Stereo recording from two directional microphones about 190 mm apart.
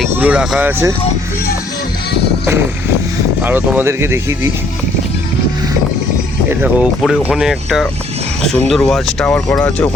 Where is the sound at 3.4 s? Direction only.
10° right (ahead or behind).